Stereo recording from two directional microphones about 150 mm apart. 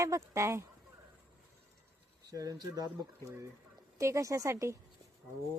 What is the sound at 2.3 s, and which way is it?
Speech, 25° right (ahead or behind).